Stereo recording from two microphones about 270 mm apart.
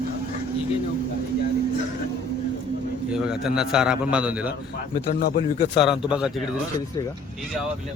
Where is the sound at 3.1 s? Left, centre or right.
Centre.